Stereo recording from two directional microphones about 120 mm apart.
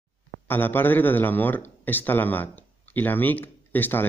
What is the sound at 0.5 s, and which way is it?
A man's voice, 15° left (ahead or behind).